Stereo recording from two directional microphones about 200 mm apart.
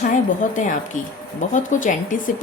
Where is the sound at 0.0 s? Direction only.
40° left (ahead or behind).